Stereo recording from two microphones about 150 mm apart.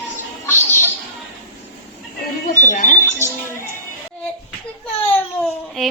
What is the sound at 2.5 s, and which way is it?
Alarm clock, 60° left (ahead or behind).